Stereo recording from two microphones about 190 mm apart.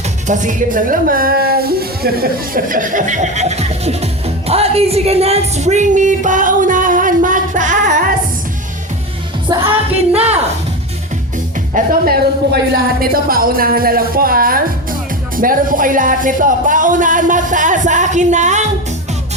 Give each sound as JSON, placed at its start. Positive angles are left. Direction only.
{"t": 0.3, "sound": "a woman's voice", "side_deg": -45}
{"t": 9.5, "sound": "music", "side_deg": -20}
{"t": 10.2, "sound": "speech", "side_deg": -35}
{"t": 11.7, "sound": "speech", "side_deg": -50}